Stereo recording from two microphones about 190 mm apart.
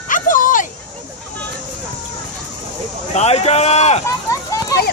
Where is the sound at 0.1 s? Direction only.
45° left (ahead or behind).